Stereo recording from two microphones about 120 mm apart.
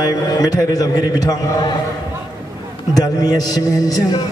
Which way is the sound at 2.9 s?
30° left (ahead or behind).